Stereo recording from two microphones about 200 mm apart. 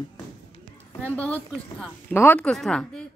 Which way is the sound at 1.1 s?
5° left (ahead or behind).